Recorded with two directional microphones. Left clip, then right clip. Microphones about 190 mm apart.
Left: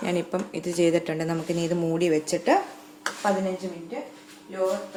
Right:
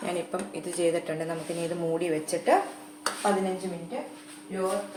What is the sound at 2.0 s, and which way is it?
Speech, 65° left (ahead or behind).